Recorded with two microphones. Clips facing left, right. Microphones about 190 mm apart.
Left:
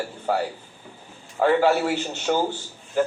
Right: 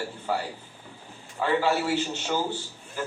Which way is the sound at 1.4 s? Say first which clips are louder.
Left 6 dB; 50° left (ahead or behind).